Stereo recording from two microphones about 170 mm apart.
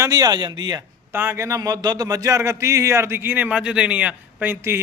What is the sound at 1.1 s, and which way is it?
A man's voice, 15° right (ahead or behind).